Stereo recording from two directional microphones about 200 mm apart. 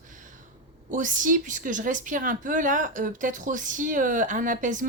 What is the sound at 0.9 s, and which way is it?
A woman's voice, 40° right (ahead or behind).